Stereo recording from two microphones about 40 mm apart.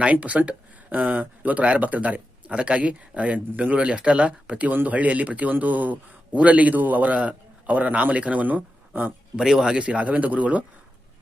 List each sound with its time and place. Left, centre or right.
0.0 s speech: right
9.3 s speech: centre
9.7 s speech: right